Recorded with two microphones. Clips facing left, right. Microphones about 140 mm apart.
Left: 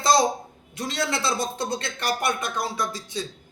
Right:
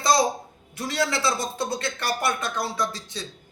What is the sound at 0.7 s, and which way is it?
A man's voice, 20° left (ahead or behind).